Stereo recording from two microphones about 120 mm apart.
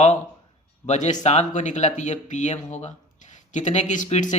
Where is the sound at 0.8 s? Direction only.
80° left.